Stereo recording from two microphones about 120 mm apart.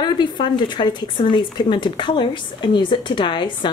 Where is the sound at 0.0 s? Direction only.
40° left (ahead or behind).